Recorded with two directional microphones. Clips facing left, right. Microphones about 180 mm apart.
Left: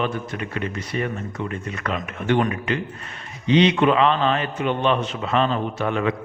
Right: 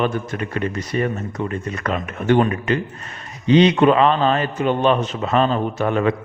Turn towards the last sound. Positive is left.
turn(degrees=-40)  # may be behind; listen again after turning